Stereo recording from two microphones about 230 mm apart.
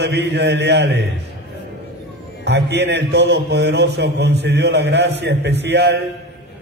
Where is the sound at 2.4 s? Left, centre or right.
Right.